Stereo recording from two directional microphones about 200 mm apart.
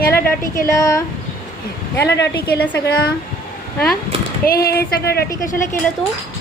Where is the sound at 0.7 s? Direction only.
15° left (ahead or behind).